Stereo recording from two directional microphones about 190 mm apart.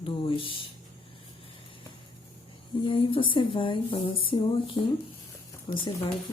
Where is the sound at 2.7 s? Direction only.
25° left (ahead or behind).